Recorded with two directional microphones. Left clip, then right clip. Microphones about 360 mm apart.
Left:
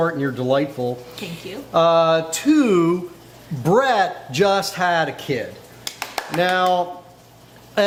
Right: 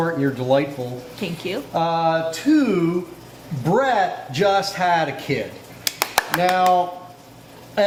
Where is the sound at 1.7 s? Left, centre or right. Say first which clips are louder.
Left 5 dB; left.